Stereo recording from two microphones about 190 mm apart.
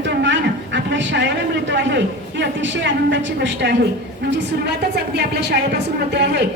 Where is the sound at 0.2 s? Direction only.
70° right (ahead or behind).